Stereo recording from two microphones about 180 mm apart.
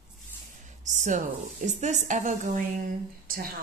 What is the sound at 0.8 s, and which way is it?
A woman's voice, 45° right (ahead or behind).